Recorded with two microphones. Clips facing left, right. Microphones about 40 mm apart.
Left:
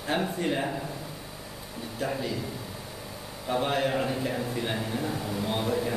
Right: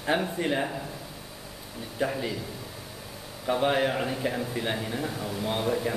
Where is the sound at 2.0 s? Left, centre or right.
Centre.